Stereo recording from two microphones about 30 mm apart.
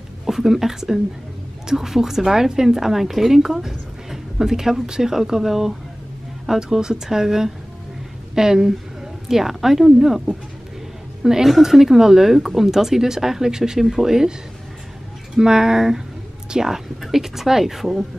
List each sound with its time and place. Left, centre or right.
0.3 s a woman's voice: centre
11.4 s a woman's voice: centre
12.4 s a woman's voice: centre
13.8 s a woman's voice: centre
15.3 s a woman's voice: centre